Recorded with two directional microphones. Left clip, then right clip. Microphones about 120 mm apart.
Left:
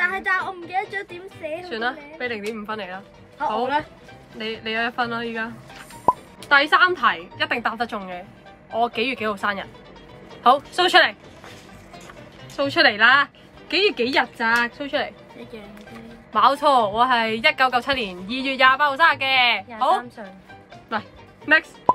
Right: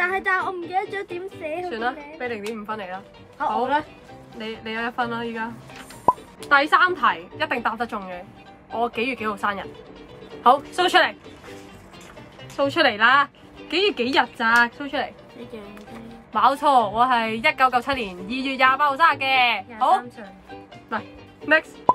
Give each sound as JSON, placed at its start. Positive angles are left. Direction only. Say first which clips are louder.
{"t": 0.0, "sound": "a woman's voice", "louder": "even", "side_deg": -45}
{"t": 1.7, "sound": "a woman's voice", "louder": "even", "side_deg": -5}
{"t": 4.4, "sound": "a woman's voice", "louder": "left 4 dB", "side_deg": -5}
{"t": 12.5, "sound": "a woman's voice", "louder": "left 2 dB", "side_deg": -15}
{"t": 16.3, "sound": "a woman's voice", "louder": "left 1 dB", "side_deg": -10}
{"t": 21.5, "sound": "speech", "louder": "left 1 dB", "side_deg": -5}